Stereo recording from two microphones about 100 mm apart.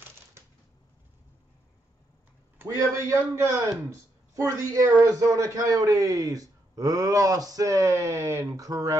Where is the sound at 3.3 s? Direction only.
30° right (ahead or behind).